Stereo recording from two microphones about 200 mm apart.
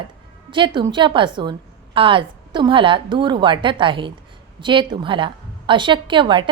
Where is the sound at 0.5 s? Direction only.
25° right (ahead or behind).